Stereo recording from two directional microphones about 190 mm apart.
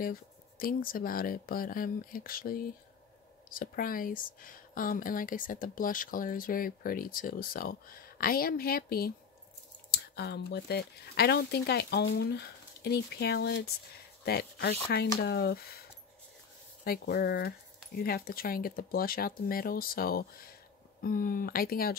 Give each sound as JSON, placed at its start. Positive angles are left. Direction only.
{"t": 0.0, "sound": "speech", "side_deg": 50}
{"t": 16.8, "sound": "speech", "side_deg": 55}